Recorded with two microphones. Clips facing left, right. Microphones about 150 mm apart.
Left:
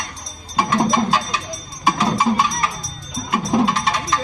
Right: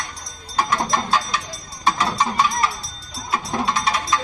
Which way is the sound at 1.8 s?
10° left (ahead or behind).